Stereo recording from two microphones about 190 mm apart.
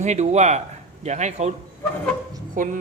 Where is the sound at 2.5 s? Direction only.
45° right (ahead or behind).